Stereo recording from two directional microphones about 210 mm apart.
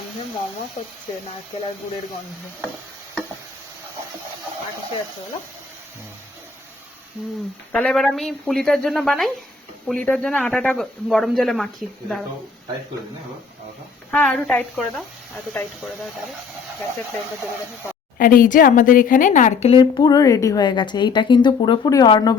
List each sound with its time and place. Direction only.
7.7 s speech: 5° left (ahead or behind)
14.1 s speech: 5° left (ahead or behind)
18.2 s speech: 40° left (ahead or behind); by 22.4 s 20° left (ahead or behind)